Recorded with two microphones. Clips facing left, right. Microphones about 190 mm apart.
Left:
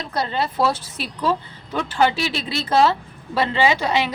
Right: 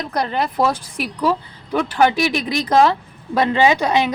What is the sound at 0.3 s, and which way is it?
A woman's voice, 15° right (ahead or behind).